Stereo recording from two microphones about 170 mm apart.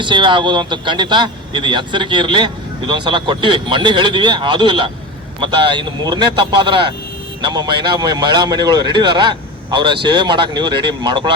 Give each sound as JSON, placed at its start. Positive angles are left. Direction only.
{"t": 0.0, "sound": "speech", "side_deg": -30}